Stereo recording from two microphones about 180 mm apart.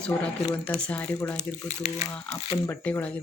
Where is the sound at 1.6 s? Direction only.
40° left (ahead or behind).